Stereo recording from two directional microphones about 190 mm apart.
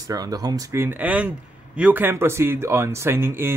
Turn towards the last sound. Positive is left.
turn(degrees=-10)  # may be behind; listen again after turning